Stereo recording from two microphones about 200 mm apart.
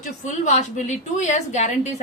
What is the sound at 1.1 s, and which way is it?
Speech, 35° left (ahead or behind).